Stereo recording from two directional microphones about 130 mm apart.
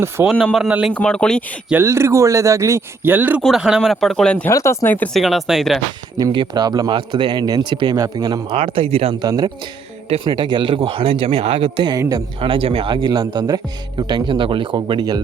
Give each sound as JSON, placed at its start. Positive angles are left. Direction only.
{"t": 0.3, "sound": "speech", "side_deg": 5}
{"t": 0.9, "sound": "speech", "side_deg": 5}
{"t": 1.7, "sound": "speech", "side_deg": -20}
{"t": 3.4, "sound": "speech", "side_deg": -5}
{"t": 4.5, "sound": "speech", "side_deg": 25}
{"t": 5.1, "sound": "speech", "side_deg": 0}
{"t": 6.1, "sound": "speech", "side_deg": -35}
{"t": 8.5, "sound": "speech", "side_deg": -45}
{"t": 9.2, "sound": "speech", "side_deg": -30}
{"t": 11.9, "sound": "speech", "side_deg": -25}
{"t": 12.4, "sound": "speech", "side_deg": -45}